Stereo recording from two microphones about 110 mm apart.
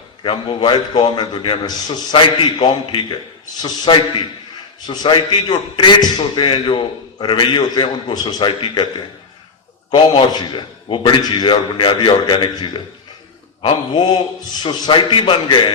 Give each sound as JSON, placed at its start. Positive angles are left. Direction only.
{"t": 0.2, "sound": "a man's voice", "side_deg": 45}
{"t": 9.9, "sound": "a man's voice", "side_deg": 40}